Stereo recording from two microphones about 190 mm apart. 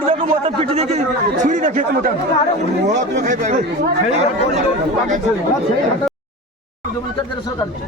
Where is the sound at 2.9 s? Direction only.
40° right (ahead or behind).